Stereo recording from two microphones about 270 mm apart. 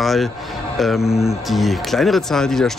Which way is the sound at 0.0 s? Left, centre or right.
Centre.